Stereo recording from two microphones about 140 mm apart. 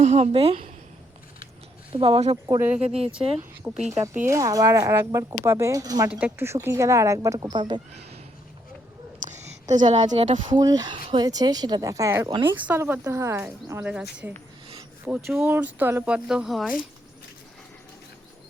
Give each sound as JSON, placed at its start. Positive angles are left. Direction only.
{"t": 0.0, "sound": "a woman's voice", "side_deg": -50}
{"t": 1.9, "sound": "speech", "side_deg": -40}
{"t": 2.5, "sound": "speech", "side_deg": -15}
{"t": 3.2, "sound": "speech", "side_deg": -40}
{"t": 3.6, "sound": "a woman's voice", "side_deg": 0}
{"t": 4.3, "sound": "speech", "side_deg": -25}
{"t": 6.1, "sound": "speech", "side_deg": -10}
{"t": 7.5, "sound": "speech", "side_deg": -35}
{"t": 9.2, "sound": "a sound", "side_deg": -60}
{"t": 10.1, "sound": "speech", "side_deg": -60}
{"t": 10.5, "sound": "speech", "side_deg": -30}